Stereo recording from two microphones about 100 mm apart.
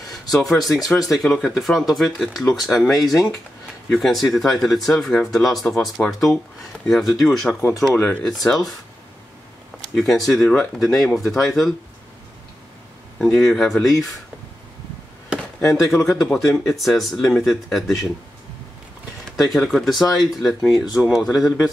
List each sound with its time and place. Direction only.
0.1 s speech: centre (ahead or behind)
7.9 s speech: 20° left (ahead or behind)
8.2 s speech: 5° left (ahead or behind)
9.9 s speech: centre (ahead or behind)
13.2 s speech: 5° left (ahead or behind)
15.6 s speech: 5° left (ahead or behind)
19.3 s speech: centre (ahead or behind)